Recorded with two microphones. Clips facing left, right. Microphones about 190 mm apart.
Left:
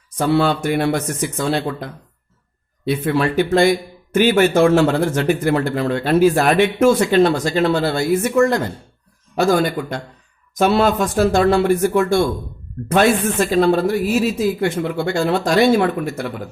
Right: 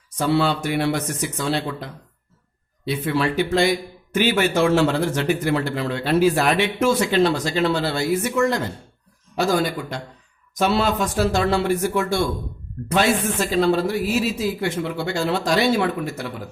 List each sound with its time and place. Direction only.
0.2 s speech: 50° left (ahead or behind)